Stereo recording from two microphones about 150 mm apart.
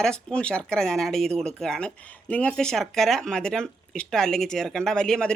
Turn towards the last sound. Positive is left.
turn(degrees=5)  # may be behind; listen again after turning